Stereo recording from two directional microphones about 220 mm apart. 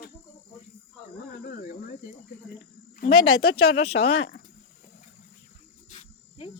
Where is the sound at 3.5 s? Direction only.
25° left (ahead or behind).